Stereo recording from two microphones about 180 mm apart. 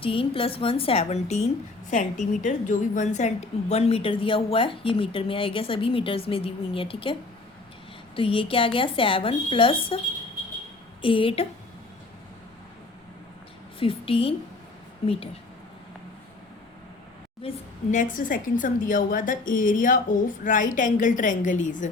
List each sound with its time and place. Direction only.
0.0 s a woman's voice: 30° left (ahead or behind)
11.0 s speech: 30° left (ahead or behind)
13.7 s a woman's voice: 30° left (ahead or behind)
17.4 s a woman's voice: 30° left (ahead or behind)
17.9 s a woman's voice: 45° left (ahead or behind)